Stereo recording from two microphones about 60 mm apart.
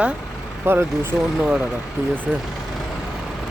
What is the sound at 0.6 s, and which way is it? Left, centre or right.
Speech, right.